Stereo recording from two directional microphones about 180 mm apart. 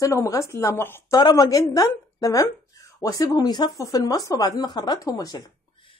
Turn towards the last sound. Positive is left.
turn(degrees=20)  # may be behind; listen again after turning